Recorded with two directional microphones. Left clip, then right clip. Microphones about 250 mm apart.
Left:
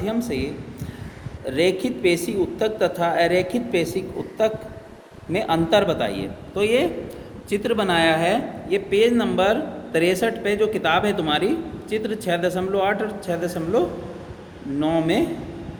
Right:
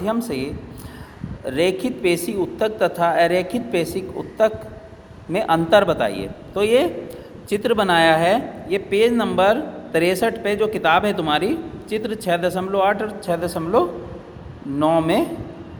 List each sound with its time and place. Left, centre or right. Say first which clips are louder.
0.0 s speech: right 2 dB; centre